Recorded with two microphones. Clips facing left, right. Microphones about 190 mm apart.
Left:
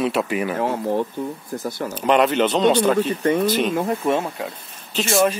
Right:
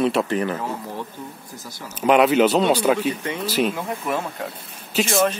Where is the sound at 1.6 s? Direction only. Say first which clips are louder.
Left 13 dB; 60° left (ahead or behind).